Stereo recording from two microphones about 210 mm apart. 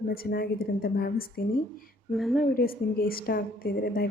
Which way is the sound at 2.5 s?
45° left (ahead or behind).